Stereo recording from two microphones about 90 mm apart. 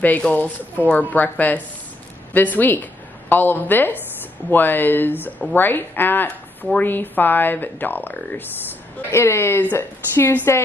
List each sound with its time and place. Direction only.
0.2 s a woman's voice: 15° left (ahead or behind)